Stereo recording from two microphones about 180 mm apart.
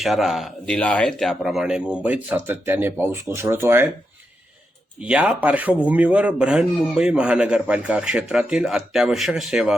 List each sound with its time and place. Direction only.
0.0 s speech: centre (ahead or behind)
4.9 s speech: 5° right (ahead or behind)